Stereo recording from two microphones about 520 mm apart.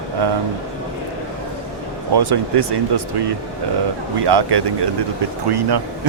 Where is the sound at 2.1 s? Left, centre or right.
Right.